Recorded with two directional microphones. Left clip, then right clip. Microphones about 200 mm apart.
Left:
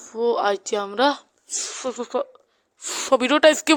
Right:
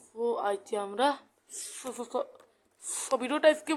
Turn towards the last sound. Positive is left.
turn(degrees=45)  # may be behind; listen again after turning